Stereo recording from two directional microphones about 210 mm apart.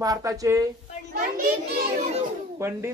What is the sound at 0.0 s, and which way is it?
Speech, 15° right (ahead or behind).